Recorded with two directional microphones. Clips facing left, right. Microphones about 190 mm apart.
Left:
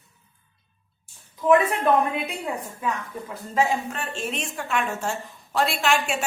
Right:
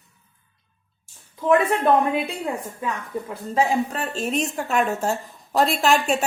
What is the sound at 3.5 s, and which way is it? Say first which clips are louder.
A woman's voice: right 3 dB; 35° right (ahead or behind).